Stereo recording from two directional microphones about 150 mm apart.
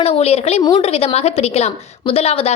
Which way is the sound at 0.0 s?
45° left (ahead or behind).